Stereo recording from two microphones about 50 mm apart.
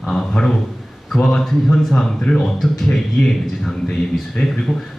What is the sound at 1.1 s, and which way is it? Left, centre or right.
Speech, centre.